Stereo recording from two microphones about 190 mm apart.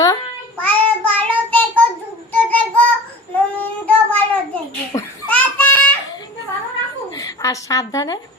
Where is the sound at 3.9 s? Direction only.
5° left (ahead or behind).